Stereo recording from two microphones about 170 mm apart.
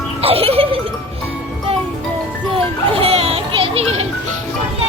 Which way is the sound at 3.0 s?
35° right (ahead or behind).